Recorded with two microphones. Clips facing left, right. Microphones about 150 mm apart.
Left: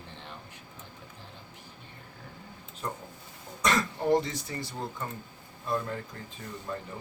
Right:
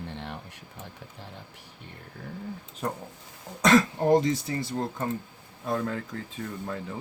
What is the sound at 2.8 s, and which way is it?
Speech, 75° right (ahead or behind).